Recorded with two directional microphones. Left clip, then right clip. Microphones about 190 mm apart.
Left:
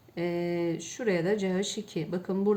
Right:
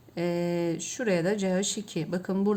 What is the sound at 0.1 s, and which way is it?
A woman's voice, 40° right (ahead or behind).